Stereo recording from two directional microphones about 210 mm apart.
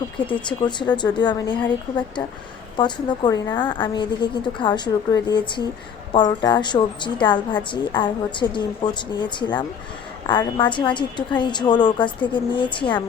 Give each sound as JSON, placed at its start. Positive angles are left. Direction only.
{"t": 0.4, "sound": "a woman's voice", "side_deg": 20}
{"t": 2.7, "sound": "a woman's voice", "side_deg": 20}